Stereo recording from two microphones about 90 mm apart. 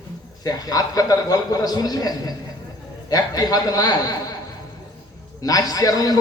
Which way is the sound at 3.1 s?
45° left (ahead or behind).